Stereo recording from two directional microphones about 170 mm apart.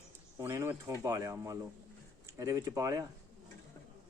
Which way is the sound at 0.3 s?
15° right (ahead or behind).